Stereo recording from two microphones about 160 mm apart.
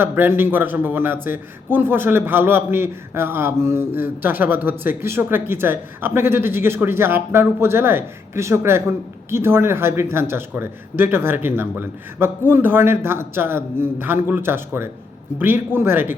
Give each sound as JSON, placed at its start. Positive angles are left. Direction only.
{"t": 0.0, "sound": "a man's voice", "side_deg": -15}